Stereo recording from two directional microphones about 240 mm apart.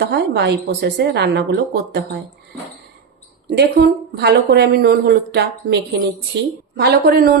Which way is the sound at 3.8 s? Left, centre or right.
Right.